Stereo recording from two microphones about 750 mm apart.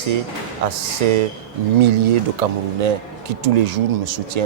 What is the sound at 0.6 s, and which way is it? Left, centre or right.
Speech, right.